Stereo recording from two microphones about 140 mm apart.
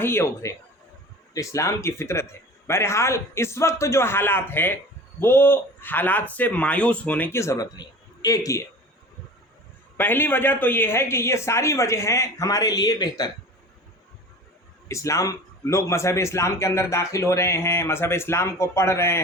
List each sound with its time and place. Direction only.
0.0 s a man's voice: 15° left (ahead or behind)
10.0 s a man's voice: 15° left (ahead or behind); by 13.3 s 30° left (ahead or behind)
14.8 s a man's voice: 20° left (ahead or behind)